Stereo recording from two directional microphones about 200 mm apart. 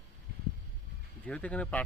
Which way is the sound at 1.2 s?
5° left (ahead or behind).